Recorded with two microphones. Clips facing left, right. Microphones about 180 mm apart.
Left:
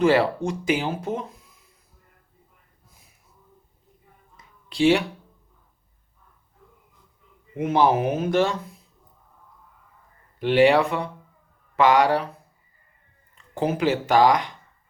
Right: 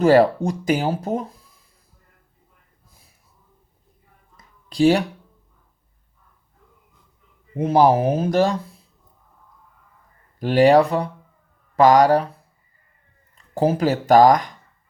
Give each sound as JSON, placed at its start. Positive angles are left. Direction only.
{"t": 0.0, "sound": "speech", "side_deg": -40}
{"t": 4.4, "sound": "a sound", "side_deg": -40}
{"t": 7.5, "sound": "speech", "side_deg": -35}
{"t": 10.4, "sound": "speech", "side_deg": -40}
{"t": 13.3, "sound": "speech", "side_deg": -35}